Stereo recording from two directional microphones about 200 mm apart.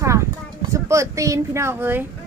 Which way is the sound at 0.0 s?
15° right (ahead or behind).